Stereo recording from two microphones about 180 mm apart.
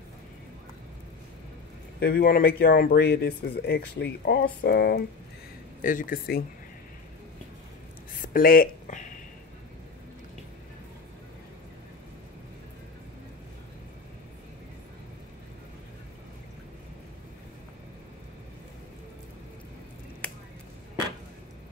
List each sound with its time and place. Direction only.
2.0 s speech: 60° left (ahead or behind)
5.8 s speech: 50° left (ahead or behind)
8.2 s a sound: 50° left (ahead or behind)